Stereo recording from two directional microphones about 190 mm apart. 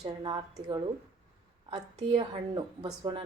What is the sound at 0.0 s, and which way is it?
A woman's voice, 25° right (ahead or behind).